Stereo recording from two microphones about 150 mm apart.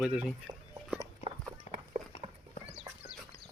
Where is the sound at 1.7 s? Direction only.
45° left (ahead or behind).